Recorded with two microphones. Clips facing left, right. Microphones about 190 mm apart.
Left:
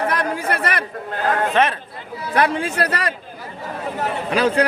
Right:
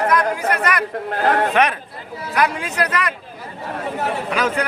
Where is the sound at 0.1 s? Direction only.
30° left (ahead or behind).